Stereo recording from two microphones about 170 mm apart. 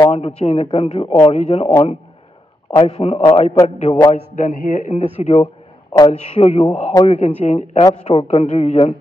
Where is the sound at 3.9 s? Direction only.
20° left (ahead or behind).